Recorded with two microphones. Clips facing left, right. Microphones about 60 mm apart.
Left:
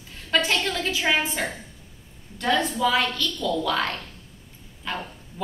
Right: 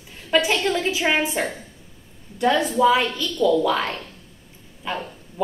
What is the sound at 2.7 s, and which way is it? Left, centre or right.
A woman's voice, centre.